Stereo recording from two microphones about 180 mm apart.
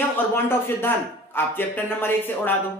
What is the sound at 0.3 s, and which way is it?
Speech, 15° left (ahead or behind).